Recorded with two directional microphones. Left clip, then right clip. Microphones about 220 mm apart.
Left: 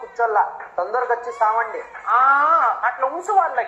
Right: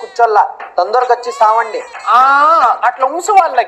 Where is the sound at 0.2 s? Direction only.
40° right (ahead or behind).